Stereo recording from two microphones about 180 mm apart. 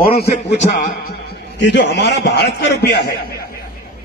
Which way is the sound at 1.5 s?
70° left (ahead or behind).